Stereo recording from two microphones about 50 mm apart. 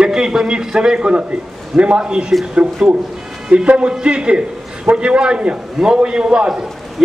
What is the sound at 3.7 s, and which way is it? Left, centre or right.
A man's voice, right.